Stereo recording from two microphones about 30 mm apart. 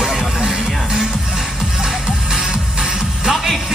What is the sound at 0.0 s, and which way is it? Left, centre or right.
Music, centre.